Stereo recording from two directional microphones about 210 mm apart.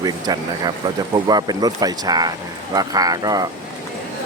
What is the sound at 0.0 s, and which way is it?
A man's voice, 20° right (ahead or behind).